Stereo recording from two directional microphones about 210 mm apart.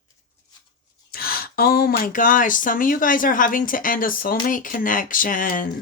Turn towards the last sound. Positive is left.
turn(degrees=40)  # may be behind; listen again after turning